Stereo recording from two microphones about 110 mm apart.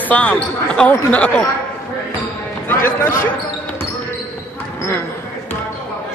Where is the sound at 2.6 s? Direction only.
20° left (ahead or behind).